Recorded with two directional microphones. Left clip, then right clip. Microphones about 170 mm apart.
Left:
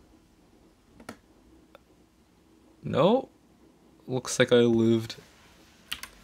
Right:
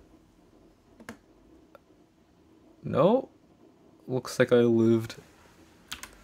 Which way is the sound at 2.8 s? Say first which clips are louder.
Even; 5° left (ahead or behind).